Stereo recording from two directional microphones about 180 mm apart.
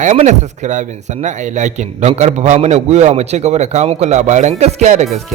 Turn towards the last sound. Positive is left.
turn(degrees=-40)  # may be behind; listen again after turning